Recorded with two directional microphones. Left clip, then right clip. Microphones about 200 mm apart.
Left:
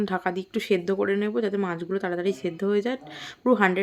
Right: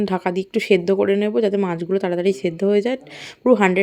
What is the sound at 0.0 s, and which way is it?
Speech, 25° right (ahead or behind).